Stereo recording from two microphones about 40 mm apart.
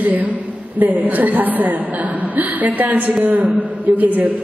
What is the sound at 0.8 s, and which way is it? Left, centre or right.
A woman's voice, right.